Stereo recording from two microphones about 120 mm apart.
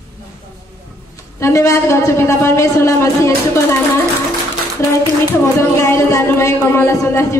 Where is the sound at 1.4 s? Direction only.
25° left (ahead or behind).